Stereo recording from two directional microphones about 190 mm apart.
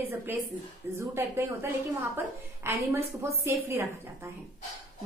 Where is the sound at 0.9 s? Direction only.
15° right (ahead or behind).